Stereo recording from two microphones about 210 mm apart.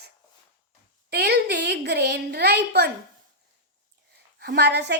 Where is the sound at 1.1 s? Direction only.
50° right (ahead or behind).